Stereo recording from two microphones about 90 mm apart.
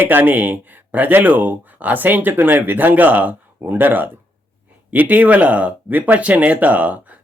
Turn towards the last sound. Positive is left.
turn(degrees=-20)  # may be behind; listen again after turning